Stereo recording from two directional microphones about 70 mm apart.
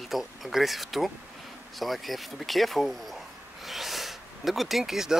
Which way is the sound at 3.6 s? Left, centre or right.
Centre.